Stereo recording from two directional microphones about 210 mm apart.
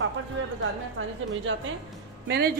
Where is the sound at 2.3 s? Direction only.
50° right (ahead or behind).